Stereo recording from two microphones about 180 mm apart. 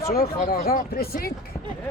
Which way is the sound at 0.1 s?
55° left (ahead or behind).